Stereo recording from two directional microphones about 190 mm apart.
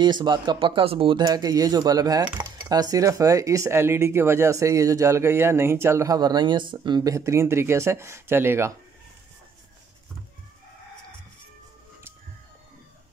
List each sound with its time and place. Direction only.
0.0 s speech: 25° right (ahead or behind)